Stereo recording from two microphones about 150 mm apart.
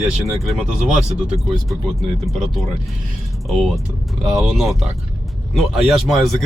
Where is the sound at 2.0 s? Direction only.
Centre (ahead or behind).